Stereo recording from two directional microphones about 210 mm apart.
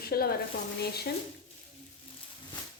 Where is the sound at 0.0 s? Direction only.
45° left (ahead or behind).